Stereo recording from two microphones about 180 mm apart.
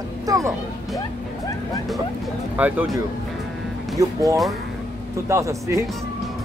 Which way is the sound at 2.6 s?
10° right (ahead or behind).